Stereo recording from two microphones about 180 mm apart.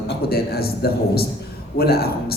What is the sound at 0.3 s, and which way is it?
A man's voice, 60° left (ahead or behind).